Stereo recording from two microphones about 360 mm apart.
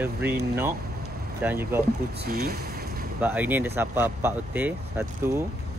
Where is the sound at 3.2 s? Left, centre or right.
Centre.